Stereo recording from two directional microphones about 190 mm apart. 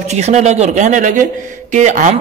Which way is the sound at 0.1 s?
35° right (ahead or behind).